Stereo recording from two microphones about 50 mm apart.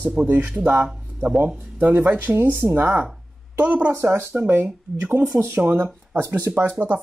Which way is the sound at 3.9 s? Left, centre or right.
Right.